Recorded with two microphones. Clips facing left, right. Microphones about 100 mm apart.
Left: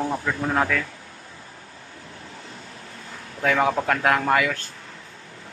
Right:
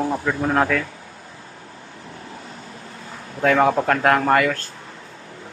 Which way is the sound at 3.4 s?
5° right (ahead or behind).